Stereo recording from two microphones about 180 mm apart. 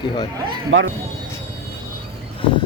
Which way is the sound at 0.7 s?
90° right.